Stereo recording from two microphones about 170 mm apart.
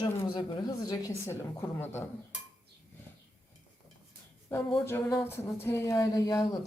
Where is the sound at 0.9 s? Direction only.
20° left (ahead or behind).